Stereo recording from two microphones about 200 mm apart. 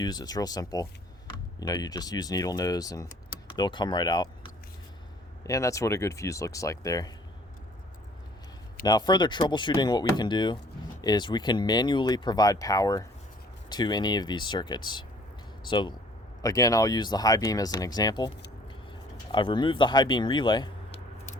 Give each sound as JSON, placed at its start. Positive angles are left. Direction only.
{"t": 0.0, "sound": "speech", "side_deg": 20}
{"t": 5.4, "sound": "speech", "side_deg": 15}
{"t": 8.8, "sound": "speech", "side_deg": 20}
{"t": 19.3, "sound": "speech", "side_deg": 25}